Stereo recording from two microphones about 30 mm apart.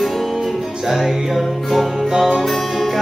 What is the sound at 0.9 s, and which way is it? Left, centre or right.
Music, centre.